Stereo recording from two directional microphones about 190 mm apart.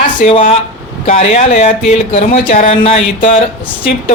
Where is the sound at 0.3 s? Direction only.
30° left (ahead or behind).